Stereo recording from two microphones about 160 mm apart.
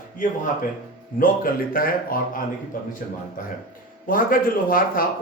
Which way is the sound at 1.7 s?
65° left (ahead or behind).